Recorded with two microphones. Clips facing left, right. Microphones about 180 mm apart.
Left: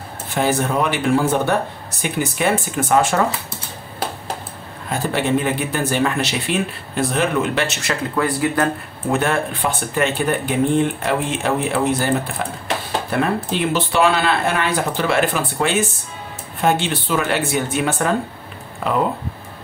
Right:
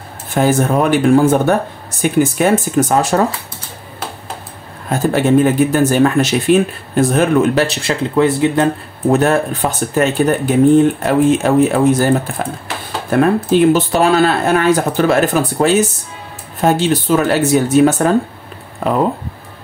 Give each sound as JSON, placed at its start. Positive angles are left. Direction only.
{"t": 0.3, "sound": "speech", "side_deg": -45}
{"t": 4.8, "sound": "speech", "side_deg": -45}
{"t": 9.1, "sound": "speech", "side_deg": -40}